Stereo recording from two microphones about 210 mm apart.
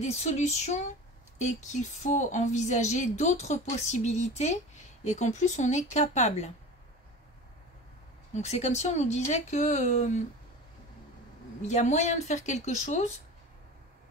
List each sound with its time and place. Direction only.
0.0 s a woman's voice: 30° left (ahead or behind)
8.4 s a woman's voice: 30° left (ahead or behind)
11.6 s a woman's voice: 35° left (ahead or behind)